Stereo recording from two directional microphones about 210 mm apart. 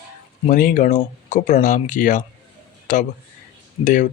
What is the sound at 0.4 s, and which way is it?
Speech, 40° left (ahead or behind).